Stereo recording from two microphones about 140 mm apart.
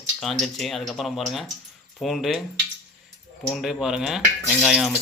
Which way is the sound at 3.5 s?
Centre (ahead or behind).